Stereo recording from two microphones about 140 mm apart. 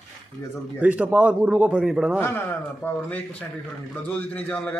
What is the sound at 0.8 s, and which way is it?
A man's voice, 10° right (ahead or behind).